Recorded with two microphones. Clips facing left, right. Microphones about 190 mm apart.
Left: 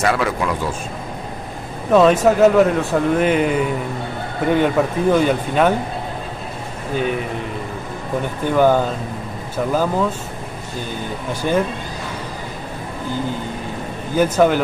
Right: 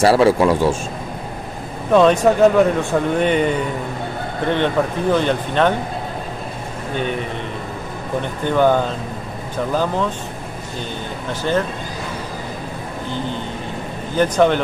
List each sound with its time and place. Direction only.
0.0 s speech: 30° right (ahead or behind)
1.9 s speech: 5° left (ahead or behind)
8.5 s speech: 10° left (ahead or behind)
14.1 s speech: 5° left (ahead or behind)